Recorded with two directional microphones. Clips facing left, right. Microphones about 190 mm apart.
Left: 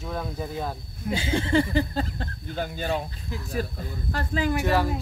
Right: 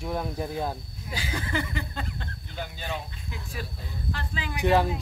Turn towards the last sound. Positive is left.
turn(degrees=-20)  # may be behind; listen again after turning